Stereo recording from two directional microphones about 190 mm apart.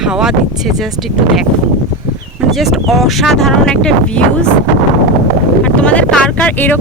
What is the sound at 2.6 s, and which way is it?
Speech, centre (ahead or behind).